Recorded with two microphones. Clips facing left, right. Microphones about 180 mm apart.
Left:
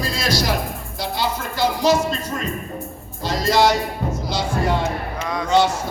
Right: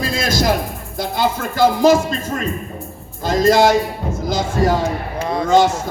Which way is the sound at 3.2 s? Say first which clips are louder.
Right 5 dB; 50° right (ahead or behind).